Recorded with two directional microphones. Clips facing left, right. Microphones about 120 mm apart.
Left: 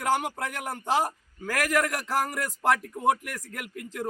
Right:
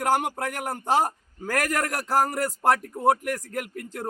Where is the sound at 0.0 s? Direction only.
45° right (ahead or behind).